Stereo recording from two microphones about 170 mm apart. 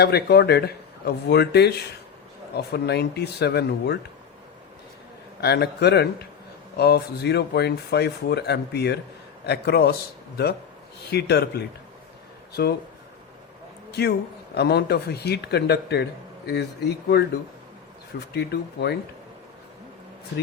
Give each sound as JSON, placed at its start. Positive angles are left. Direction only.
{"t": 0.0, "sound": "speech", "side_deg": 70}
{"t": 5.4, "sound": "speech", "side_deg": 70}
{"t": 11.1, "sound": "speech", "side_deg": 75}
{"t": 13.9, "sound": "speech", "side_deg": 75}
{"t": 18.3, "sound": "speech", "side_deg": 75}